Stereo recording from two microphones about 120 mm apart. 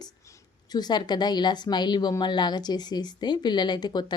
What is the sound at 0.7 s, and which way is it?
A woman's voice, 35° left (ahead or behind).